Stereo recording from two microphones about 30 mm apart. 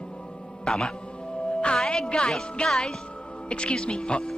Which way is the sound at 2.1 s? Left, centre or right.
Left.